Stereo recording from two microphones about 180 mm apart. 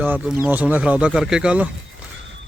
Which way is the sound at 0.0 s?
10° right (ahead or behind).